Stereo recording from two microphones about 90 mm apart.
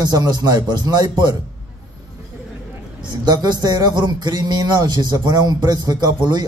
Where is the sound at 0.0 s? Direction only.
50° right (ahead or behind).